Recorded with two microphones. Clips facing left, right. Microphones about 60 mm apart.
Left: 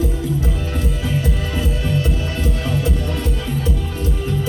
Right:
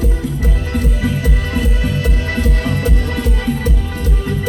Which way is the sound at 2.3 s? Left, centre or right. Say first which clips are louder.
Right 4 dB; right.